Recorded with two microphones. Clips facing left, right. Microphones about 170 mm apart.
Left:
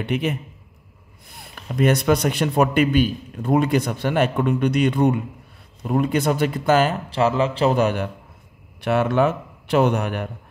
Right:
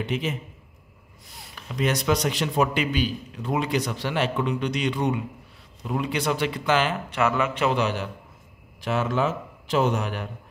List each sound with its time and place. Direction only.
0.0 s a man's voice: 60° left (ahead or behind); by 7.0 s 45° left (ahead or behind)
7.1 s speech: 30° left (ahead or behind)
7.7 s a man's voice: 50° left (ahead or behind)